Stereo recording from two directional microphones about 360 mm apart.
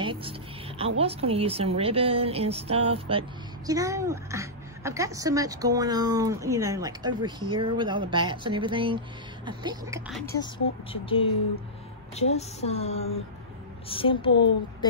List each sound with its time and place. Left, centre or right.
0.0 s a woman's voice: centre
10.3 s speech: centre